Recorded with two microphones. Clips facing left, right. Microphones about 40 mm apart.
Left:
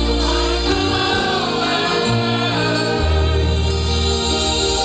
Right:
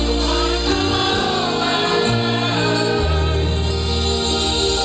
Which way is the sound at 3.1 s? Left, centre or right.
Left.